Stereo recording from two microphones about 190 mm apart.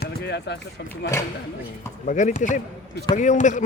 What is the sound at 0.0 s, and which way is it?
Run, 60° left (ahead or behind).